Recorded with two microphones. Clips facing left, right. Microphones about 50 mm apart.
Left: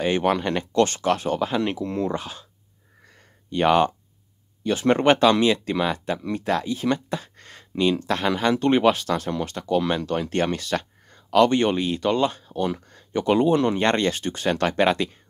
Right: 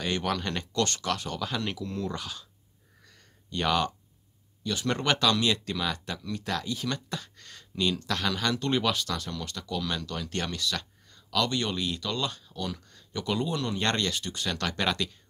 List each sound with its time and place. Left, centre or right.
0.0 s speech: left
3.0 s a sound: left
3.4 s speech: left